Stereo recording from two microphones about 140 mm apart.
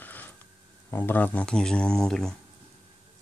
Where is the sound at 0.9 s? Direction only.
15° left (ahead or behind).